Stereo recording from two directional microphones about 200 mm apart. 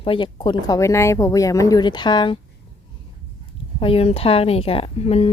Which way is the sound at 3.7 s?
30° left (ahead or behind).